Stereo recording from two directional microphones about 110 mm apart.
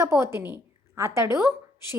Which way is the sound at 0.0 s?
25° right (ahead or behind).